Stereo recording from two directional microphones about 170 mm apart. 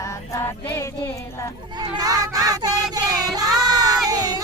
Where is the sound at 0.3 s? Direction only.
15° left (ahead or behind).